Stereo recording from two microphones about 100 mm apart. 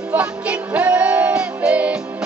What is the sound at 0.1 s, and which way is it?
Music, 15° right (ahead or behind).